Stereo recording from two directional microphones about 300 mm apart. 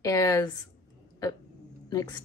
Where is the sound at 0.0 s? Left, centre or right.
Centre.